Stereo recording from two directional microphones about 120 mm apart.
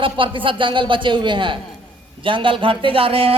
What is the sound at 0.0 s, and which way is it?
A man's voice, 45° right (ahead or behind).